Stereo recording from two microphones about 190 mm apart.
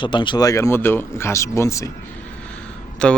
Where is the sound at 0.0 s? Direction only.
25° left (ahead or behind).